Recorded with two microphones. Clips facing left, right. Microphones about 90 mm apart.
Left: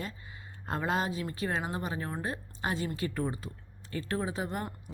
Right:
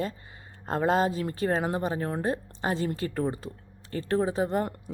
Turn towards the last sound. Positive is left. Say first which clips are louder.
# right 8 dB
turn(degrees=-35)  # may be behind; listen again after turning